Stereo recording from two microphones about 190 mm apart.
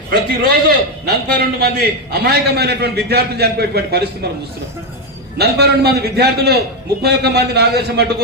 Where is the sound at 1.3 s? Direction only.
60° right (ahead or behind).